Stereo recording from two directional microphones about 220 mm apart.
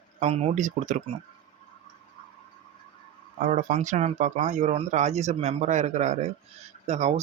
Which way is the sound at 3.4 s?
35° right (ahead or behind).